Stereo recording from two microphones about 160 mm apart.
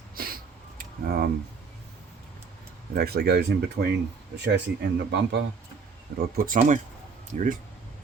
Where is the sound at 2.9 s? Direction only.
80° right.